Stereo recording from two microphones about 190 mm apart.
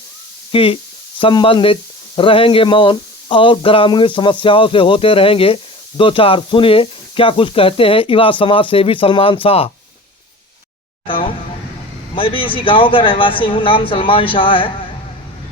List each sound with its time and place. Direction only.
0.5 s speech: 30° left (ahead or behind)
11.0 s a sound: 25° left (ahead or behind)
12.1 s speech: 25° left (ahead or behind)